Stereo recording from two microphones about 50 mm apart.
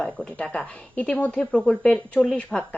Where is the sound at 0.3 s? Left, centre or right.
Left.